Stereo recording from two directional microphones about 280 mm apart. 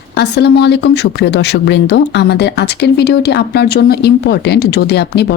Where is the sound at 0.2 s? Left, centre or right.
Left.